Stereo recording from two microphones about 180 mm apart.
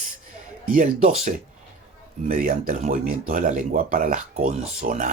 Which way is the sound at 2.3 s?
50° right (ahead or behind).